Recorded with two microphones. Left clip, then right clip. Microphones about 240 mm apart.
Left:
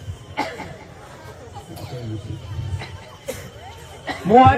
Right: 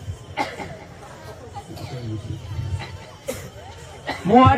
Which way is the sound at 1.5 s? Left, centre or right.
Right.